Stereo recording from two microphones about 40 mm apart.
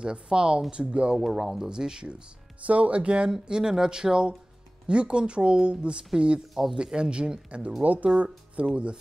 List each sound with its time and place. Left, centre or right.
0.0 s speech: right
1.1 s speech: centre
1.7 s speech: centre
2.6 s speech: right
6.5 s speech: centre
6.9 s speech: right
7.8 s speech: right
8.6 s speech: right